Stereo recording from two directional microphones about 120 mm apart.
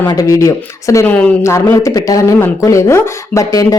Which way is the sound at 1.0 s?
10° left (ahead or behind).